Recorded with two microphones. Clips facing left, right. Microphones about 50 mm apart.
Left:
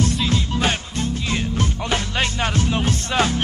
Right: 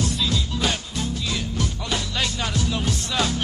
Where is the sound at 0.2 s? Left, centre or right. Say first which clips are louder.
Left 3 dB; left.